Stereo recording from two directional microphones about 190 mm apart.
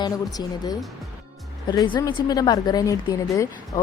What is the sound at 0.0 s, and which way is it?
A woman's voice, 20° left (ahead or behind).